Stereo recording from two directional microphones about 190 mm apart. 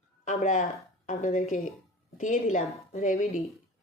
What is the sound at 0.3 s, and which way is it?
Speech, 40° left (ahead or behind).